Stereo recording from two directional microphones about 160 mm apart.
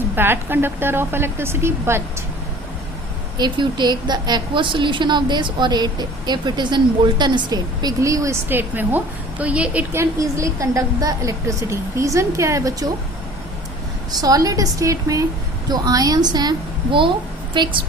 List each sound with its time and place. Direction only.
0.2 s a woman's voice: 15° right (ahead or behind)
3.3 s a woman's voice: 25° right (ahead or behind)
14.2 s a woman's voice: 20° right (ahead or behind)